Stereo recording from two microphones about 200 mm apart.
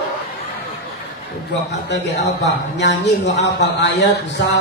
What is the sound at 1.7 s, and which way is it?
Speech, 60° left (ahead or behind).